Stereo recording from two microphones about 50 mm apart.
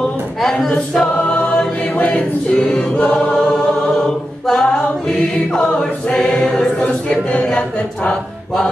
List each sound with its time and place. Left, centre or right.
0.0 s choir: centre; by 3.4 s left
3.9 s a capella: centre
5.5 s choir: centre
6.6 s a capella: left